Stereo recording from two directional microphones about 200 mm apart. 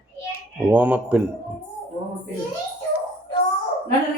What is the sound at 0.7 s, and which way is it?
Speech, 5° right (ahead or behind).